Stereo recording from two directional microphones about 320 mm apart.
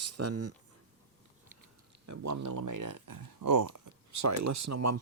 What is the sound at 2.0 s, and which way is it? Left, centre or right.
Speech, right.